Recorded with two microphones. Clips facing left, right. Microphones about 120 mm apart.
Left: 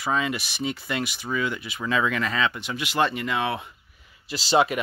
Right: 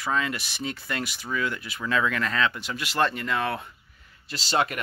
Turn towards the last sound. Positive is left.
turn(degrees=15)  # may be behind; listen again after turning